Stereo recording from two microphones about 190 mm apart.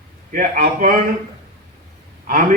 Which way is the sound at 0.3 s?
45° right (ahead or behind).